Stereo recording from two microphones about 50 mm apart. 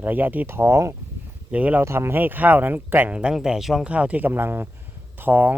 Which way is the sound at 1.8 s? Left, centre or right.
Right.